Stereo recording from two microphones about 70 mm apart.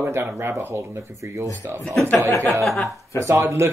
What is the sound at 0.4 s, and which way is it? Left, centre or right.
Speech, right.